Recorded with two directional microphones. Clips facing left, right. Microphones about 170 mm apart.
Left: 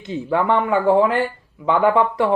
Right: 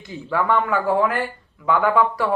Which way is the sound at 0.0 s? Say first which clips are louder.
Left 3 dB; 25° left (ahead or behind).